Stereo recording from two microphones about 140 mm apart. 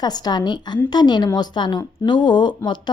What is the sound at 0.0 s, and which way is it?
A woman's voice, 30° left (ahead or behind).